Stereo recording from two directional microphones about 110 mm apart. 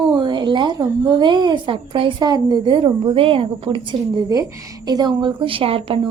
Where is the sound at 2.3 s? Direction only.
40° right (ahead or behind).